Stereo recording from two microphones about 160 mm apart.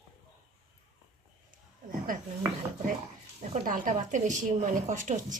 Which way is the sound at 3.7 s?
55° right (ahead or behind).